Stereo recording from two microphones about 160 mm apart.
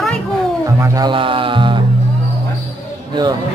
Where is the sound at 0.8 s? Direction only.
20° right (ahead or behind).